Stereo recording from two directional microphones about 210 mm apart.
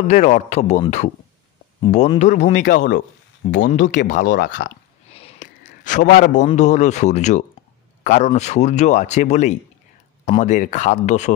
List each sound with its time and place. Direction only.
0.1 s speech: 35° left (ahead or behind)
4.0 s speech: 55° left (ahead or behind)
5.1 s a man's voice: 35° left (ahead or behind)